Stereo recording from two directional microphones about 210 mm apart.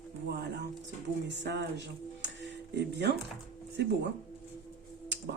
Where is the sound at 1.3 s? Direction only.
55° right (ahead or behind).